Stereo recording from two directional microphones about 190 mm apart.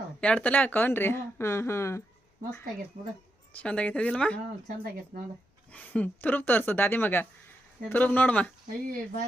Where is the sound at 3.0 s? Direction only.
45° right (ahead or behind).